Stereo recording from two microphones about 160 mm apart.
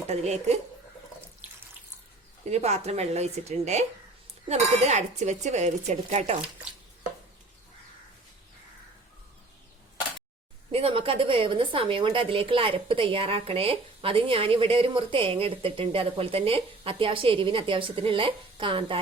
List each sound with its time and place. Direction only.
0.1 s speech: 40° right (ahead or behind)
2.4 s speech: 40° right (ahead or behind)
10.7 s a woman's voice: 35° right (ahead or behind)